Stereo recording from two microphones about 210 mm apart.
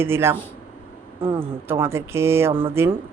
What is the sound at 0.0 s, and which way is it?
Speech, 10° right (ahead or behind).